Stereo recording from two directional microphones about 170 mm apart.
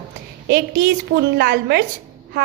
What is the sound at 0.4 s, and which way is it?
A woman's voice, 75° right (ahead or behind).